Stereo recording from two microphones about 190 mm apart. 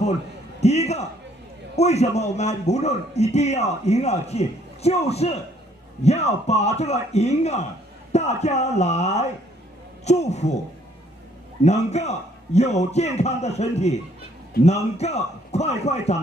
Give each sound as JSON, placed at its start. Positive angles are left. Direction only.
{"t": 0.0, "sound": "a sound", "side_deg": 35}
{"t": 1.8, "sound": "a man's voice", "side_deg": 35}
{"t": 11.6, "sound": "a man's voice", "side_deg": 35}